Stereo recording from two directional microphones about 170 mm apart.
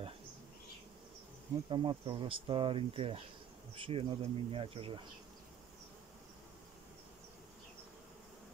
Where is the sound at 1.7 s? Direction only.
30° right (ahead or behind).